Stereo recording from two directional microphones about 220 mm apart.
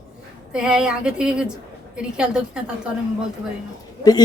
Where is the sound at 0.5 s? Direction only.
5° right (ahead or behind).